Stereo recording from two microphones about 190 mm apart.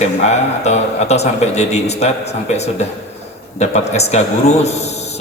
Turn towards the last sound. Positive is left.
turn(degrees=35)  # may be behind; listen again after turning